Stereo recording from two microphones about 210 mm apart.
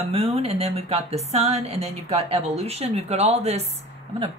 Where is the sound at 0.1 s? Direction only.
30° right (ahead or behind).